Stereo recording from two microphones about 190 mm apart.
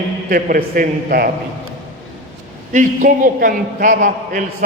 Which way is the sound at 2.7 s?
40° right (ahead or behind).